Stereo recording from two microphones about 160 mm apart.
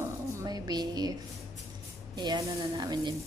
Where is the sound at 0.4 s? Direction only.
25° right (ahead or behind).